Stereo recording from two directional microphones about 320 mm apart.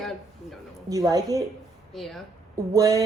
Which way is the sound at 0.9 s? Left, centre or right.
Centre.